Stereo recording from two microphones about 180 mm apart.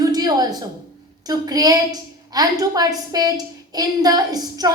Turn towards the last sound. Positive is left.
turn(degrees=-20)  # may be behind; listen again after turning